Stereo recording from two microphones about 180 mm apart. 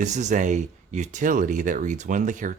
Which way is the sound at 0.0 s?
40° right (ahead or behind).